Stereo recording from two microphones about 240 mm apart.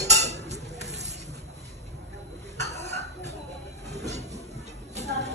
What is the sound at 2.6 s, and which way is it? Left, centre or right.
Cough, right.